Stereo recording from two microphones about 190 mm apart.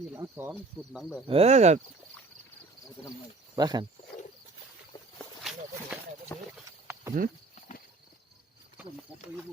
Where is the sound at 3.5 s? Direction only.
20° right (ahead or behind).